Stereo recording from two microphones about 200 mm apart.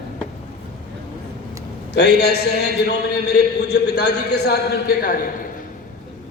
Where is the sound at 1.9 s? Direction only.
55° left (ahead or behind).